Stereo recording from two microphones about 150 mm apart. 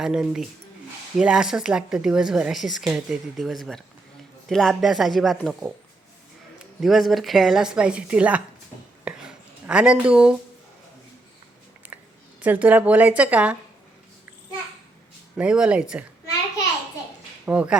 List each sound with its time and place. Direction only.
0.0 s a woman's voice: 5° right (ahead or behind)
6.7 s a woman's voice: centre (ahead or behind)
9.0 s a sound: 5° right (ahead or behind)
11.8 s a sound: 10° right (ahead or behind)
12.4 s a woman's voice: 10° right (ahead or behind)
15.4 s a woman's voice: 5° right (ahead or behind)
17.4 s speech: 10° right (ahead or behind)